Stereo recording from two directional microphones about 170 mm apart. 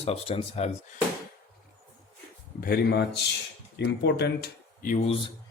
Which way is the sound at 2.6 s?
70° left (ahead or behind).